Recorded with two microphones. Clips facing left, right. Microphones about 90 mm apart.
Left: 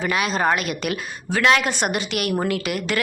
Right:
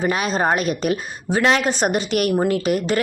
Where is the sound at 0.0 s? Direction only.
35° right (ahead or behind).